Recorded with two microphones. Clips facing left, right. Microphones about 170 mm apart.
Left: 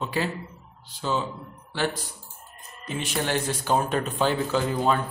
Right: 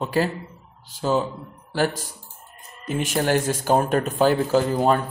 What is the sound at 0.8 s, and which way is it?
Speech, 45° right (ahead or behind).